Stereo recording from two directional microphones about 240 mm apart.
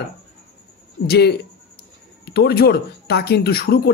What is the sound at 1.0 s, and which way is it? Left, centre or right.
Speech, left.